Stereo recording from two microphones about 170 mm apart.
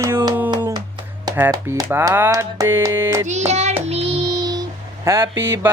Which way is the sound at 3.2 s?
40° right (ahead or behind).